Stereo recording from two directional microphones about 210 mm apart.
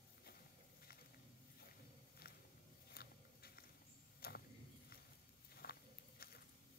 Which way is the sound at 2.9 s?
45° left (ahead or behind).